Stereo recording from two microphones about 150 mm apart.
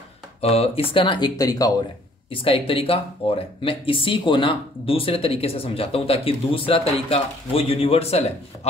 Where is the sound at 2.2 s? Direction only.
35° left (ahead or behind).